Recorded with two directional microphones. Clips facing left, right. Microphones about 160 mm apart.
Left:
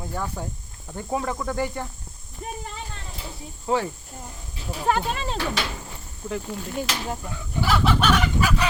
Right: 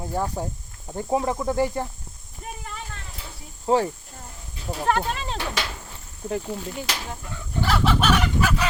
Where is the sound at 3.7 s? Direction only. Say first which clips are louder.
Right 3 dB; 30° right (ahead or behind).